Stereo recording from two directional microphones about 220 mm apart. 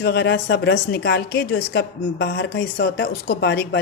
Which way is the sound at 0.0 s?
50° left (ahead or behind).